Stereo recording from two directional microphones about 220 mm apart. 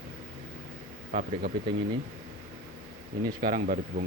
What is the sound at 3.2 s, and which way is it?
Speech, 40° right (ahead or behind).